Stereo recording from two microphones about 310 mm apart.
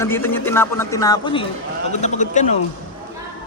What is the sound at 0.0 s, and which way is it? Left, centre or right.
Speech, centre.